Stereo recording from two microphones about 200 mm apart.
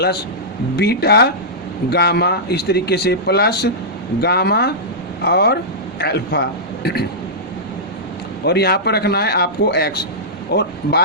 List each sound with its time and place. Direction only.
0.8 s a man's voice: 55° left (ahead or behind)
8.4 s a man's voice: 55° left (ahead or behind)